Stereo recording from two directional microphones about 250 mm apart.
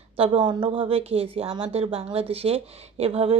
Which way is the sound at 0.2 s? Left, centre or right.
Right.